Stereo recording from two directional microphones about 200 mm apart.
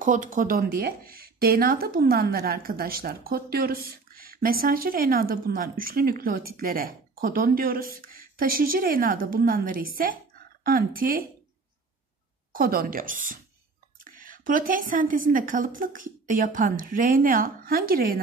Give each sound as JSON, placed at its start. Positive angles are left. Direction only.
{"t": 0.0, "sound": "speech", "side_deg": -40}
{"t": 12.5, "sound": "speech", "side_deg": -45}